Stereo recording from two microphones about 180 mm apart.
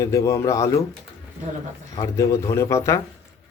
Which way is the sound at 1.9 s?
20° left (ahead or behind).